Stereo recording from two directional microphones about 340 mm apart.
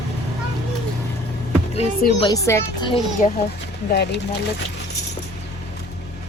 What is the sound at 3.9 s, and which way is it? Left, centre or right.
Speech, left.